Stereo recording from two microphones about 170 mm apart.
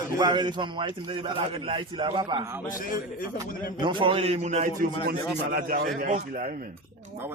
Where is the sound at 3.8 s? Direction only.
30° right (ahead or behind); by 4.9 s 45° right (ahead or behind).